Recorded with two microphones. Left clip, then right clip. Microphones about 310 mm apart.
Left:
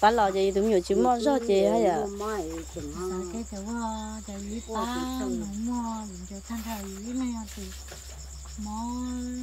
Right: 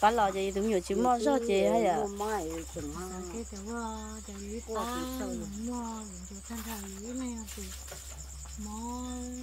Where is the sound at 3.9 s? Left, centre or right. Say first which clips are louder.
Left 6 dB; centre.